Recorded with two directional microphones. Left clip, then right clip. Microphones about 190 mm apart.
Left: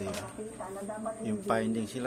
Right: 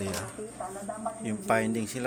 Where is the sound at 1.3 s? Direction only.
5° right (ahead or behind).